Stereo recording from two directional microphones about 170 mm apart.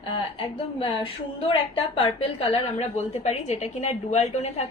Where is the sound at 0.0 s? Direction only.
30° left (ahead or behind).